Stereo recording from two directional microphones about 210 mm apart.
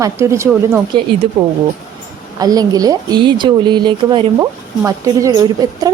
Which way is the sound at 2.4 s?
20° right (ahead or behind).